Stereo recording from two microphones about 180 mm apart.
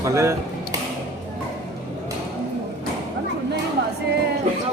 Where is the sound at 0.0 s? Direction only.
15° right (ahead or behind).